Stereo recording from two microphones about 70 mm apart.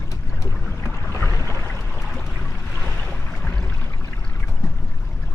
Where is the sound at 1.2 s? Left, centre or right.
Left.